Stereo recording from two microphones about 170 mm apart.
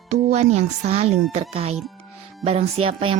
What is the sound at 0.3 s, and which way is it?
Speech, 40° right (ahead or behind).